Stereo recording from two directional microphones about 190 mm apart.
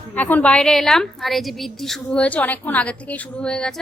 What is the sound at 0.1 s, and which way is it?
A woman's voice, 10° left (ahead or behind).